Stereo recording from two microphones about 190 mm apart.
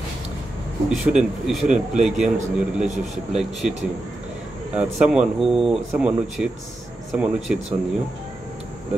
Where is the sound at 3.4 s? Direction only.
5° right (ahead or behind).